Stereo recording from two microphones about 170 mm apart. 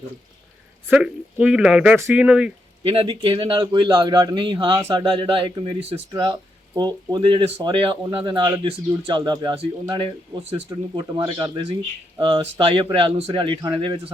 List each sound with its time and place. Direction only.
0.9 s speech: 5° right (ahead or behind)
2.8 s a man's voice: 35° right (ahead or behind)